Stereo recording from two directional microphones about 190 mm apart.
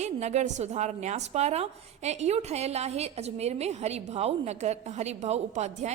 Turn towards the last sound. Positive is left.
turn(degrees=-35)  # may be behind; listen again after turning